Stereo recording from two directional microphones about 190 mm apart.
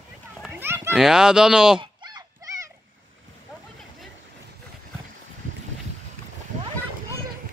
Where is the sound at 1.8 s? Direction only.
20° right (ahead or behind).